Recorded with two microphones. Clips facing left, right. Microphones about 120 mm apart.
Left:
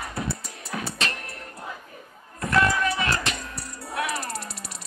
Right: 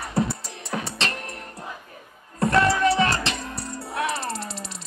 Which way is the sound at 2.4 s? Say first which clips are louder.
Right 3 dB; 30° right (ahead or behind).